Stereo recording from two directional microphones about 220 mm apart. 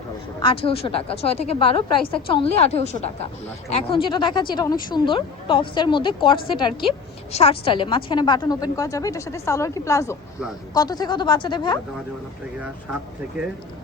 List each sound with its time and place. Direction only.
0.3 s a woman's voice: 25° left (ahead or behind)